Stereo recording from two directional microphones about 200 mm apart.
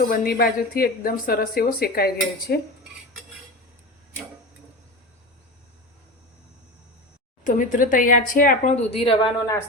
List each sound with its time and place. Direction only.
0.0 s speech: 45° left (ahead or behind)
7.4 s speech: 40° left (ahead or behind)